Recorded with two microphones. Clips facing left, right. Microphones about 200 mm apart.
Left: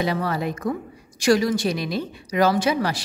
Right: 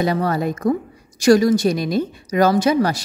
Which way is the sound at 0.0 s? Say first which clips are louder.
Right 4 dB; 45° right (ahead or behind).